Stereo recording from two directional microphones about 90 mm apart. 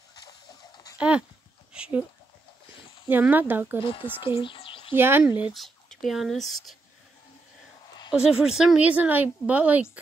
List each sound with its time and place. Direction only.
0.1 s a sound: 50° left (ahead or behind)
0.9 s speech: 10° right (ahead or behind)
1.7 s a sound: 15° right (ahead or behind)
3.1 s speech: 20° right (ahead or behind)
3.8 s speech: 70° left (ahead or behind)
4.9 s speech: 25° right (ahead or behind)
5.5 s speech: centre (ahead or behind)
8.1 s a woman's voice: 5° right (ahead or behind)